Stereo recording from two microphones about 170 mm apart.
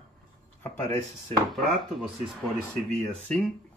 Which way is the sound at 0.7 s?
20° left (ahead or behind).